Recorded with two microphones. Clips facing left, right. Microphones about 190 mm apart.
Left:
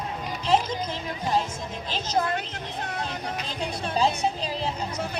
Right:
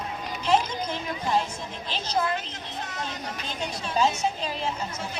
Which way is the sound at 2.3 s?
60° left (ahead or behind).